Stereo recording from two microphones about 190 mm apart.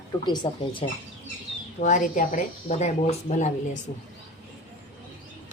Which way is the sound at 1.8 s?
40° left (ahead or behind).